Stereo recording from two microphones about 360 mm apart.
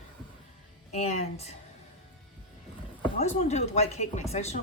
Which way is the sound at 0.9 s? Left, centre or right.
Centre.